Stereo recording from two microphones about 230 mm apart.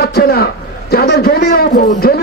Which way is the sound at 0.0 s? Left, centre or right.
Left.